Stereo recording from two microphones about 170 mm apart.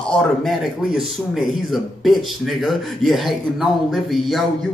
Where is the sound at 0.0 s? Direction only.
5° left (ahead or behind).